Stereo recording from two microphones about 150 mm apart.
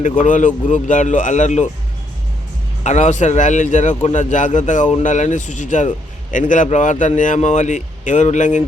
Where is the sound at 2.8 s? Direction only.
50° left (ahead or behind).